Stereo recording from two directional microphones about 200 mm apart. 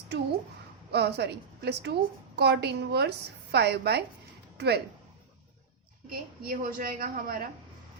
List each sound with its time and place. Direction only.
0.9 s a woman's voice: 55° right (ahead or behind)
6.1 s a woman's voice: 45° right (ahead or behind)